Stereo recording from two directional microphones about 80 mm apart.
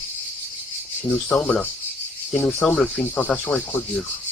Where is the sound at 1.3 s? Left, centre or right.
Centre.